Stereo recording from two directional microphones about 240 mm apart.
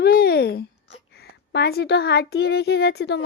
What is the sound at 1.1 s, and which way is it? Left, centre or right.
Speech, left.